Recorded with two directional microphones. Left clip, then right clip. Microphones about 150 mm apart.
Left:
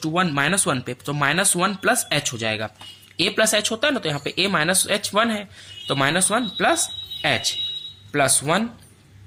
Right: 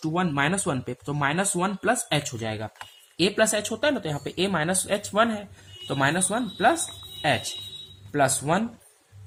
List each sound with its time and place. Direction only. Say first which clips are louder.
0.0 s speech: left 4 dB; 15° left (ahead or behind)